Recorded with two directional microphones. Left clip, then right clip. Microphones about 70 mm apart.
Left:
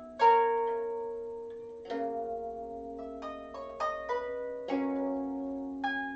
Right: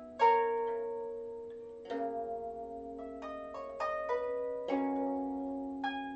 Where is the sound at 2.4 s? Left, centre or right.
Centre.